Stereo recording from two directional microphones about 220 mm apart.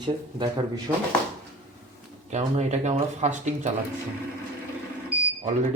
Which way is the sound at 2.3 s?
30° right (ahead or behind).